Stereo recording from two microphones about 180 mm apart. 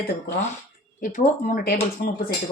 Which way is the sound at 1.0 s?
50° left (ahead or behind).